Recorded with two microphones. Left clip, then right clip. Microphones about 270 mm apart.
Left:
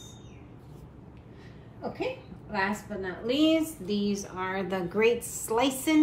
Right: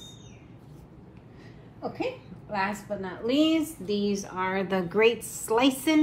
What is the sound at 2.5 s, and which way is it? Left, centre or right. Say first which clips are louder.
A woman's voice: right 1 dB; right.